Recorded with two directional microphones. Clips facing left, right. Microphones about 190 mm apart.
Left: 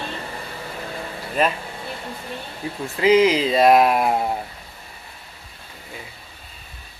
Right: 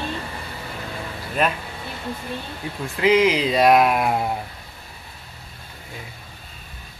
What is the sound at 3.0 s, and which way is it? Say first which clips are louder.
Speech: left 2 dB; centre (ahead or behind).